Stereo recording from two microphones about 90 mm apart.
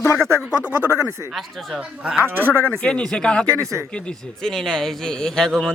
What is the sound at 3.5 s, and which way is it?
Speech, 35° right (ahead or behind).